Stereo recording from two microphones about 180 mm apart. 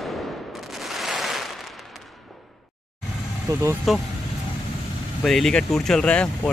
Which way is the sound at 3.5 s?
20° right (ahead or behind).